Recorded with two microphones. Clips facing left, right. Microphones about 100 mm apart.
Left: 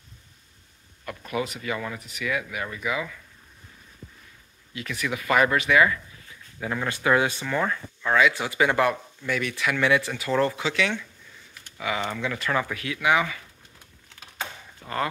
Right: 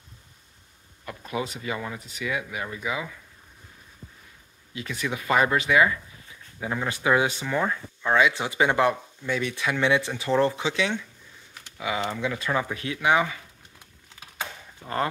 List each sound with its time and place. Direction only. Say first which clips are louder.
1.0 s speech: left 1 dB; 25° right (ahead or behind)
4.7 s speech: even; 25° right (ahead or behind)
12.1 s speech: even; 20° right (ahead or behind)
14.8 s speech: right 1 dB; 10° right (ahead or behind)